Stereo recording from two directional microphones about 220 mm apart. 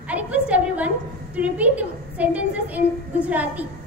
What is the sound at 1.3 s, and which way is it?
A woman's voice, 5° right (ahead or behind).